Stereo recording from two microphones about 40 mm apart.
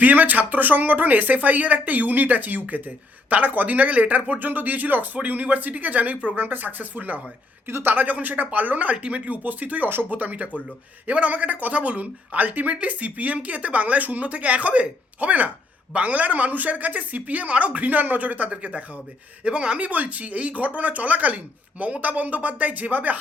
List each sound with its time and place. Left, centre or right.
0.0 s speech: right
6.3 s speech: right
7.7 s speech: right
7.9 s speech: right
17.8 s speech: right